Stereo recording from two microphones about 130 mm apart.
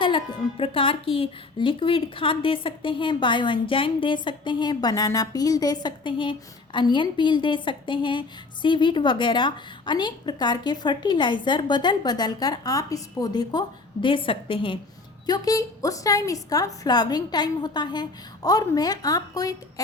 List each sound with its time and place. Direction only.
0.0 s speech: 40° left (ahead or behind)
15.3 s a woman's voice: 25° left (ahead or behind)